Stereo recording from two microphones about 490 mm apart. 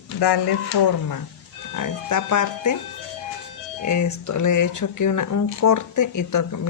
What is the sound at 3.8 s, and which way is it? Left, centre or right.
Speech, left.